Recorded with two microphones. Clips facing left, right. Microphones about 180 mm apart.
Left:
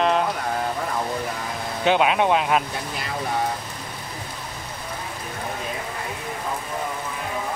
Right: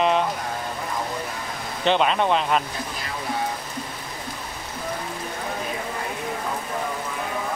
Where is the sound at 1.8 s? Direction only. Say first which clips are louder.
Left 1 dB; 5° left (ahead or behind).